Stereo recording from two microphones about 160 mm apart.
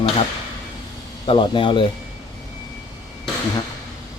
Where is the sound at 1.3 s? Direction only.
35° left (ahead or behind).